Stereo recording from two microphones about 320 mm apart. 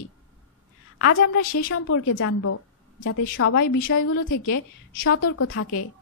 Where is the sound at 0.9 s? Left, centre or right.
Left.